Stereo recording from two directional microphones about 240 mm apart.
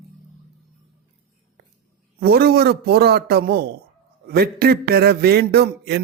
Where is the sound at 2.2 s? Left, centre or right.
Right.